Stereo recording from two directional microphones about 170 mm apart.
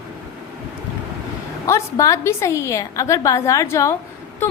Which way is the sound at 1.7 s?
20° left (ahead or behind).